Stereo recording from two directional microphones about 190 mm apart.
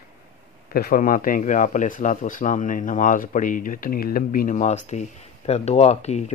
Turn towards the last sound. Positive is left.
turn(degrees=35)  # may be behind; listen again after turning